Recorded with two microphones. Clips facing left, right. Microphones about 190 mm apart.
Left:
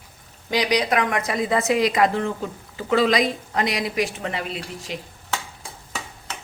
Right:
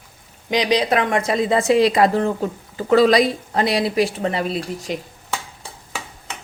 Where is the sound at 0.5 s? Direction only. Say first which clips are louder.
Right 3 dB; 25° right (ahead or behind); by 4.9 s 40° right (ahead or behind).